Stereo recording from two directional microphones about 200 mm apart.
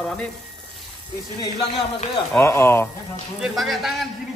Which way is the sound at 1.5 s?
25° left (ahead or behind).